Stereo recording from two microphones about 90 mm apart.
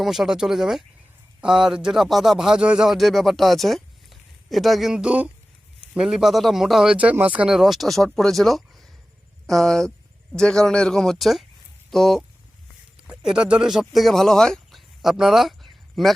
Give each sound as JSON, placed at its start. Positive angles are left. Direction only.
{"t": 0.0, "sound": "a man's voice", "side_deg": -5}
{"t": 6.9, "sound": "speech", "side_deg": -15}
{"t": 7.5, "sound": "a man's voice", "side_deg": -5}
{"t": 13.1, "sound": "speech", "side_deg": -10}